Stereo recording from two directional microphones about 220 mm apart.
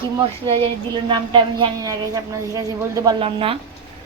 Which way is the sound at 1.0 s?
20° right (ahead or behind).